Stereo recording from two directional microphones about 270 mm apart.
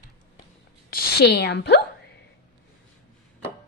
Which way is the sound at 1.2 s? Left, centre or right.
Left.